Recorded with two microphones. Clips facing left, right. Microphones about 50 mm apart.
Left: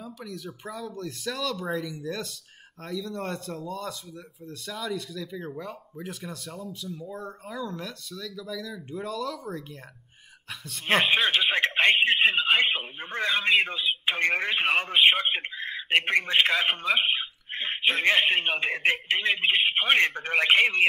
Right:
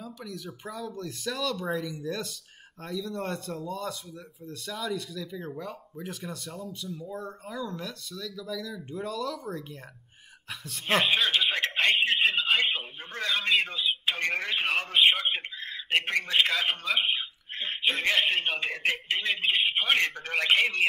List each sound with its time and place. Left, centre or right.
0.0 s speech: centre
10.9 s a man's voice: centre
14.3 s a man's voice: centre
17.0 s a sound: left
18.0 s a man's voice: centre
18.9 s a man's voice: left
19.2 s a man's voice: centre